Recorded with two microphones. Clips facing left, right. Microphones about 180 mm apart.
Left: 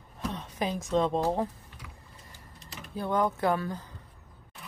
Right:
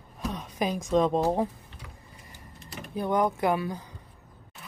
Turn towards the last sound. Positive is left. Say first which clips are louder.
# right 1 dB
turn(degrees=-15)  # may be behind; listen again after turning